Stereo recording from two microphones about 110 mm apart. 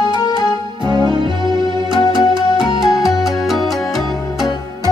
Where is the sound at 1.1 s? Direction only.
45° right (ahead or behind).